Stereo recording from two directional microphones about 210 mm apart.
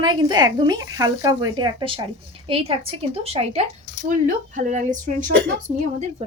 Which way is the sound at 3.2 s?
30° right (ahead or behind).